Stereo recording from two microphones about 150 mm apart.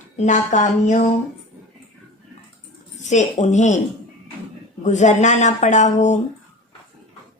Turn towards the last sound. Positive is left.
turn(degrees=50)  # may be behind; listen again after turning